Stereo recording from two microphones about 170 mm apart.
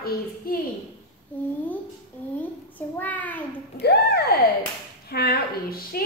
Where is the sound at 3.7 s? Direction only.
70° left (ahead or behind).